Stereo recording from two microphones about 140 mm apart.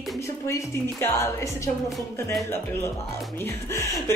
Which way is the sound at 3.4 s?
20° left (ahead or behind).